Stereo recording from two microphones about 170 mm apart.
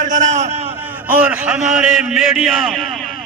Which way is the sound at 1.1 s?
10° right (ahead or behind).